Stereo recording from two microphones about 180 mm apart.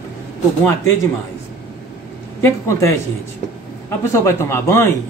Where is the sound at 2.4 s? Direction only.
15° left (ahead or behind).